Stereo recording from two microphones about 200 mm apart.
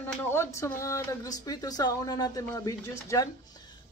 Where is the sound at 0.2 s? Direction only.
10° left (ahead or behind).